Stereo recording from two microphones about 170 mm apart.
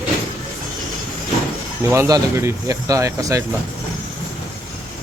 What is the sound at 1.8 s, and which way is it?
Speech, 15° right (ahead or behind).